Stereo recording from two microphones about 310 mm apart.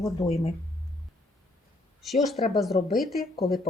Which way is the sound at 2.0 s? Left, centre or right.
Centre.